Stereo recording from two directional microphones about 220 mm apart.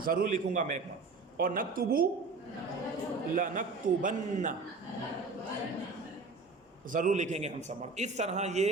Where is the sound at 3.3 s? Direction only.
40° right (ahead or behind).